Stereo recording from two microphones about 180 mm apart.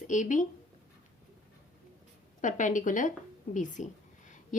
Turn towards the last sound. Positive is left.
turn(degrees=45)  # may be behind; listen again after turning